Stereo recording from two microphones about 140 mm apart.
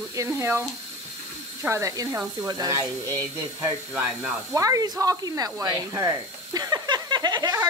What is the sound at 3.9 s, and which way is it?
Speech, 5° right (ahead or behind).